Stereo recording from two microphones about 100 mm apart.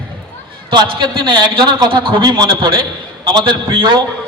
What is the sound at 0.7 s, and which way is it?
A man's voice, 50° right (ahead or behind).